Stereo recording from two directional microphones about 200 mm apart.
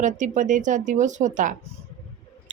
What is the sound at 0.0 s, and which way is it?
A woman's voice, 40° right (ahead or behind).